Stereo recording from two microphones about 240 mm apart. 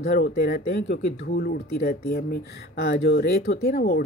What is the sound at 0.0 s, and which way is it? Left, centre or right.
Speech, left.